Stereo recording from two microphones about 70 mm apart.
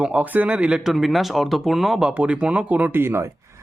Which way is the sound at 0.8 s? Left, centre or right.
Centre.